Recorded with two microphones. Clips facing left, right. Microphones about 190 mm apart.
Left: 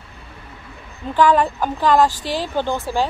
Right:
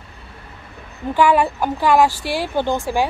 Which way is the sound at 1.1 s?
10° right (ahead or behind).